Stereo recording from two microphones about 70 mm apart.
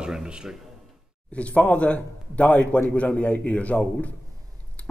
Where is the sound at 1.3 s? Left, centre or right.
Centre.